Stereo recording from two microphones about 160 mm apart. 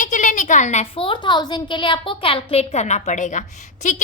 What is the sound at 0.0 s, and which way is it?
A woman's voice, 50° left (ahead or behind).